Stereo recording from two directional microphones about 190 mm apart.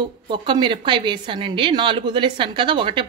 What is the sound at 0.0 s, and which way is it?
A woman's voice, 25° right (ahead or behind).